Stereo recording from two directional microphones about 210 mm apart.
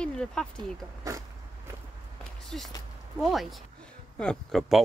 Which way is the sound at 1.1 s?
15° right (ahead or behind).